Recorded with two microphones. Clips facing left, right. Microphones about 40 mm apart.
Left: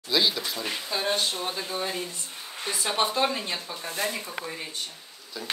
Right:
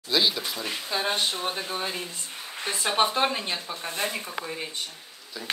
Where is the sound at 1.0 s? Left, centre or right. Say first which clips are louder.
Even; right.